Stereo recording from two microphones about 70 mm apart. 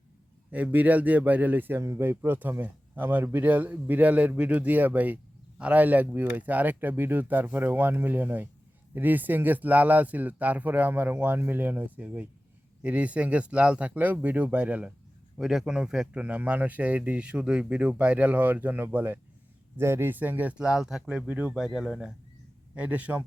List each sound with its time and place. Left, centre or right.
0.5 s speech: right
15.4 s speech: centre
16.2 s speech: right
20.6 s speech: centre
22.7 s speech: centre